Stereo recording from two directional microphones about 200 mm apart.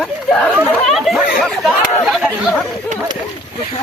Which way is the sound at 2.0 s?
Centre (ahead or behind).